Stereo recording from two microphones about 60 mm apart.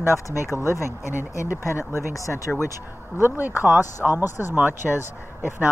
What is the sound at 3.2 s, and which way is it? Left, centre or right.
Speech, right.